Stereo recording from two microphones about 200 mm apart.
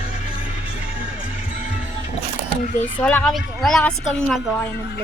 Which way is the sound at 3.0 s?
5° left (ahead or behind).